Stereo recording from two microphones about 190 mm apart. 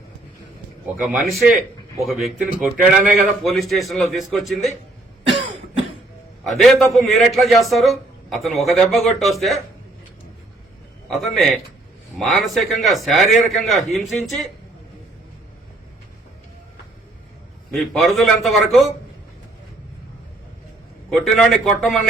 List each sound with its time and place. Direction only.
0.9 s a man's voice: centre (ahead or behind)
5.3 s cough: 30° right (ahead or behind)
6.4 s a man's voice: centre (ahead or behind)
11.1 s a man's voice: centre (ahead or behind)
17.7 s a man's voice: centre (ahead or behind)
21.1 s a man's voice: centre (ahead or behind)